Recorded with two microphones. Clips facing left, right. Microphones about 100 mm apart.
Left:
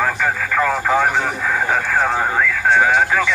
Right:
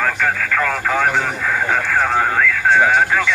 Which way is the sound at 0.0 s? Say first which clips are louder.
Even; 10° left (ahead or behind).